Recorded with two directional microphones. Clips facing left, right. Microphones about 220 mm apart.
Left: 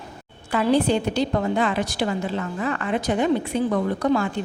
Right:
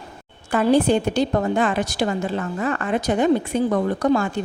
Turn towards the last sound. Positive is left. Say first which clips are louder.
# right 2 dB
turn(degrees=-45)  # may be behind; listen again after turning